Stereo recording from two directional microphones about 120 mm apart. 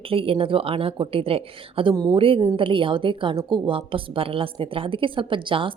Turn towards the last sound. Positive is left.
turn(degrees=-45)  # may be behind; listen again after turning